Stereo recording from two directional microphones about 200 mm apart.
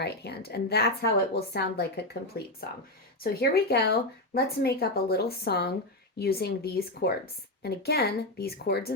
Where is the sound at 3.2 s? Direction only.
50° left (ahead or behind).